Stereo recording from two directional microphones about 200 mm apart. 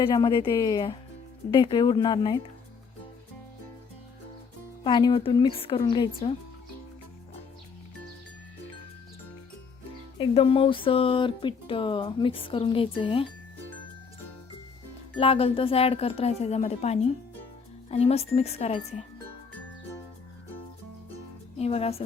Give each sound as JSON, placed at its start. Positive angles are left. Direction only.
{"t": 0.0, "sound": "speech", "side_deg": 20}
{"t": 4.8, "sound": "speech", "side_deg": 25}
{"t": 10.2, "sound": "speech", "side_deg": 25}
{"t": 15.2, "sound": "speech", "side_deg": 30}
{"t": 21.6, "sound": "speech", "side_deg": 30}